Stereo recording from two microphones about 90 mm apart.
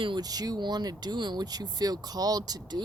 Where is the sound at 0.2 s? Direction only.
45° right (ahead or behind).